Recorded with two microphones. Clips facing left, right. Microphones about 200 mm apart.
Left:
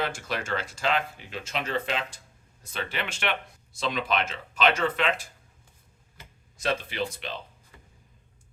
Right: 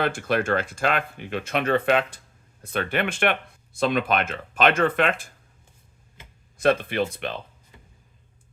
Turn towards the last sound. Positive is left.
turn(degrees=-55)  # may be behind; listen again after turning